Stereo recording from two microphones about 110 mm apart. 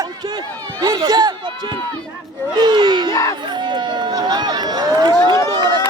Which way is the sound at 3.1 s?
30° left (ahead or behind).